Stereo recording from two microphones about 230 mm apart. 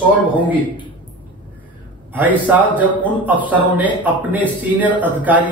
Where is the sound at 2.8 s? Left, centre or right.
Centre.